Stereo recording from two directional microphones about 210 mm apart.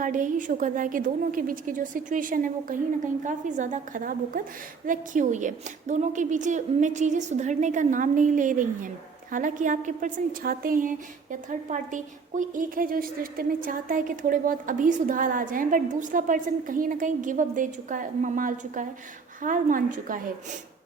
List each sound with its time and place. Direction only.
0.0 s speech: 40° right (ahead or behind)